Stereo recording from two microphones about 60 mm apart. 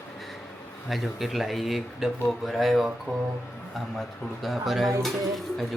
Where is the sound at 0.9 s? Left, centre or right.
Centre.